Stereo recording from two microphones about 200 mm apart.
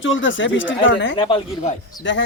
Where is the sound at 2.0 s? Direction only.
65° left (ahead or behind).